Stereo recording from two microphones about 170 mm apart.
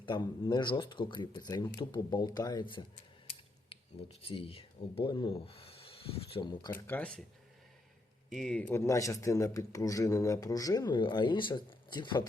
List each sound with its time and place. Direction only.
0.0 s speech: 30° left (ahead or behind)
6.8 s speech: 10° left (ahead or behind)
8.3 s speech: centre (ahead or behind); by 12.3 s 25° left (ahead or behind)